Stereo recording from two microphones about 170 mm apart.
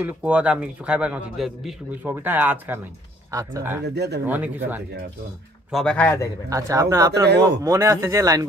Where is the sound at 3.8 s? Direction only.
80° right.